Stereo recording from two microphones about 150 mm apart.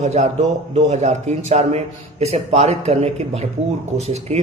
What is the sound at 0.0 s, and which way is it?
Speech, 50° right (ahead or behind).